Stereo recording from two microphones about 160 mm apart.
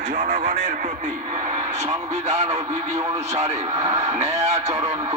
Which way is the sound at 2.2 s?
45° right (ahead or behind).